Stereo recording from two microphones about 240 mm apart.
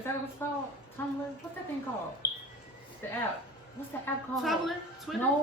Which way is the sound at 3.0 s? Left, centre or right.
Centre.